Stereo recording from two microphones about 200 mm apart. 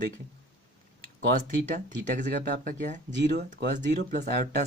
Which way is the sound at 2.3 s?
50° right (ahead or behind).